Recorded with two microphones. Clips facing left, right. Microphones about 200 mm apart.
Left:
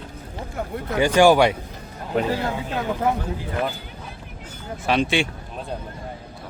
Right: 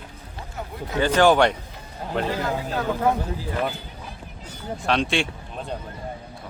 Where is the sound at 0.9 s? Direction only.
10° left (ahead or behind).